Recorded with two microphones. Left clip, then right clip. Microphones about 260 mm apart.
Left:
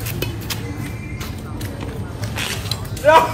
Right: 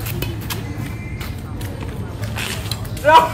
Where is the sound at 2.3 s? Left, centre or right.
Centre.